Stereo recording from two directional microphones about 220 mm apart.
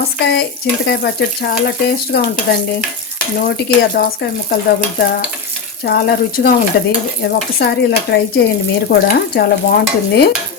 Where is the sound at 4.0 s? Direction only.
45° left (ahead or behind).